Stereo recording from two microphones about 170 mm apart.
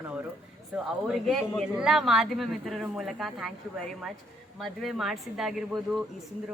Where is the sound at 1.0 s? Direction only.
Centre (ahead or behind).